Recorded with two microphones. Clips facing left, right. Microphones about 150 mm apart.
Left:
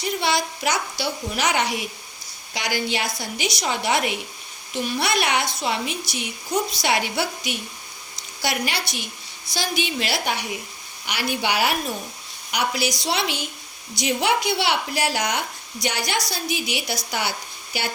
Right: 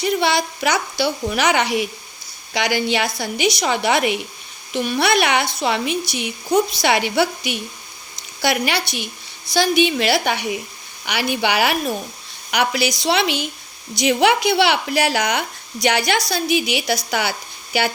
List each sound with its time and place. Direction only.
0.2 s a woman's voice: 70° right (ahead or behind)